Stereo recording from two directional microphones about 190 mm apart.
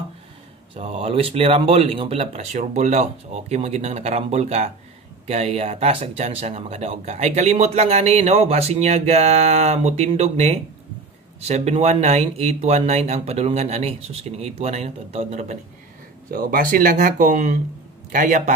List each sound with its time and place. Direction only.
0.7 s speech: 35° right (ahead or behind)
16.3 s speech: 50° right (ahead or behind)